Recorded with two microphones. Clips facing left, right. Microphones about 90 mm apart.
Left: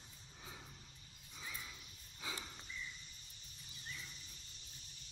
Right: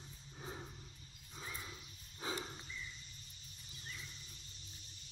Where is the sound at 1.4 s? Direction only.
35° right (ahead or behind).